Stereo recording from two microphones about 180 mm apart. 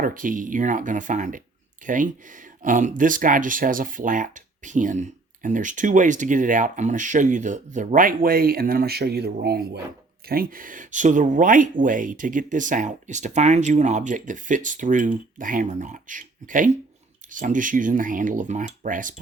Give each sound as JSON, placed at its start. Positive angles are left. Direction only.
{"t": 0.0, "sound": "speech", "side_deg": -50}